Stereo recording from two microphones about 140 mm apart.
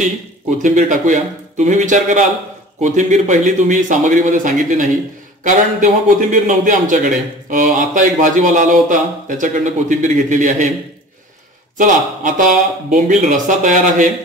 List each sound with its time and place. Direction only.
0.6 s a man's voice: 65° right (ahead or behind)
11.8 s a man's voice: 65° right (ahead or behind)